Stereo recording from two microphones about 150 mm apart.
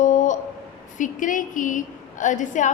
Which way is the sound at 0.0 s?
55° left (ahead or behind).